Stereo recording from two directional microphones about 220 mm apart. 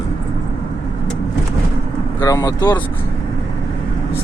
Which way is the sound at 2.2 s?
15° left (ahead or behind).